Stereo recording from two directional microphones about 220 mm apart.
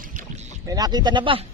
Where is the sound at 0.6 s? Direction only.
15° right (ahead or behind).